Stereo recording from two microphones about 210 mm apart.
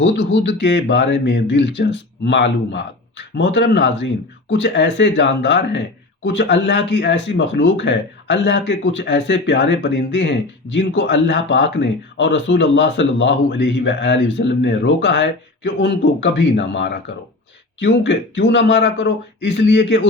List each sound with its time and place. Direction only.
0.0 s speech: 60° left (ahead or behind)